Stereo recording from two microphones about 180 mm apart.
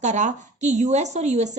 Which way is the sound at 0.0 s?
40° right (ahead or behind).